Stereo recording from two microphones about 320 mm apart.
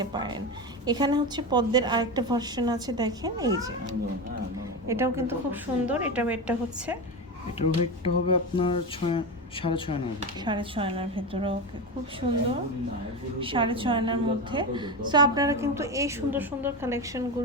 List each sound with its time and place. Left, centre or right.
0.0 s a woman's voice: centre
4.9 s a woman's voice: centre
7.6 s speech: centre
10.2 s a woman's voice: centre
13.4 s a woman's voice: centre